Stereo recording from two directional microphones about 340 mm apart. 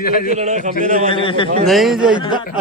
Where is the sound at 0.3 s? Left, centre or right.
Centre.